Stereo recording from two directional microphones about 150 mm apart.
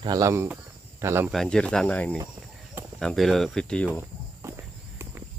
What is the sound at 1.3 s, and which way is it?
Speech, 5° left (ahead or behind).